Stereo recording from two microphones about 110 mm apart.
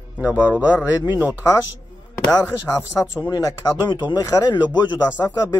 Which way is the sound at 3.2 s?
40° left (ahead or behind).